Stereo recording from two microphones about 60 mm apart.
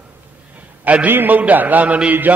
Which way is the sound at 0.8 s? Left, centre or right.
Right.